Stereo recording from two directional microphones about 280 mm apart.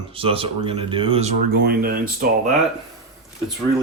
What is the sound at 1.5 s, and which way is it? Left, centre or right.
Speech, right.